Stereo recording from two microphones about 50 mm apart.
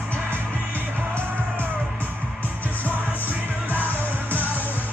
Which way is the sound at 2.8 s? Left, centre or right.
Left.